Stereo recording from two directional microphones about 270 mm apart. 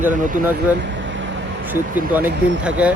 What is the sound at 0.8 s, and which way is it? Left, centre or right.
Vehicle, right.